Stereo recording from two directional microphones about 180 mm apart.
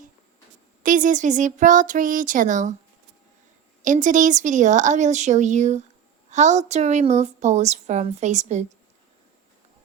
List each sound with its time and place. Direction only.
0.8 s speech: 45° right (ahead or behind)
3.8 s a woman's voice: 45° right (ahead or behind)